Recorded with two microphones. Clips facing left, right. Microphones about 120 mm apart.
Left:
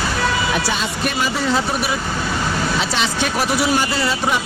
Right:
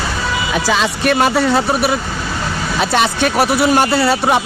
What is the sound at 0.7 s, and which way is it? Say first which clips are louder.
Speech: right 7 dB; 80° right.